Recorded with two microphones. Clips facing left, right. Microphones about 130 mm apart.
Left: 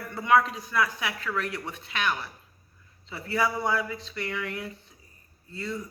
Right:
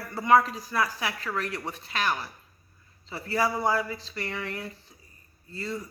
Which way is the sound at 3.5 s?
30° right (ahead or behind).